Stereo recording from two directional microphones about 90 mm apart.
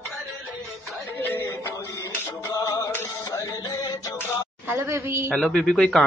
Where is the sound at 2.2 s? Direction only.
30° left (ahead or behind).